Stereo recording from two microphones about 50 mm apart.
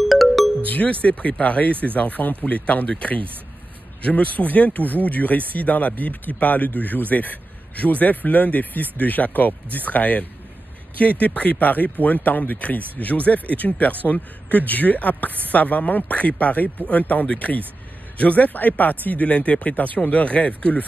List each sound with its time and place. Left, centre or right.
0.1 s music: centre
0.7 s speech: left